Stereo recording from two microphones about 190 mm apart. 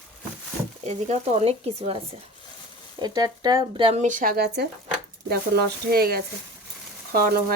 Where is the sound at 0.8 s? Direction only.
35° right (ahead or behind).